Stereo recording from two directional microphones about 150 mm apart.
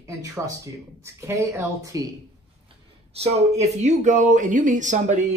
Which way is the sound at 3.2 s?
45° right (ahead or behind).